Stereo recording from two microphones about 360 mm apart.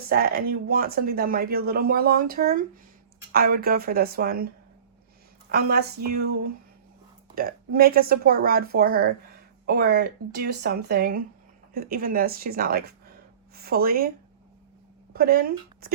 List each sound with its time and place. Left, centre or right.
0.0 s speech: right
5.5 s speech: right
15.1 s speech: right